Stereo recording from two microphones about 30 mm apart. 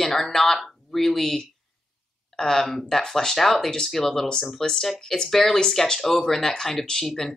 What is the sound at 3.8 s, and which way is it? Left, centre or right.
Speech, centre.